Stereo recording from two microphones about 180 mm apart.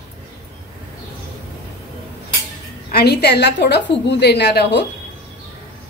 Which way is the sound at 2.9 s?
60° left (ahead or behind).